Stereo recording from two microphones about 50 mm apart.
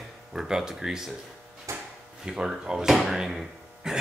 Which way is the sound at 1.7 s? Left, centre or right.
Right.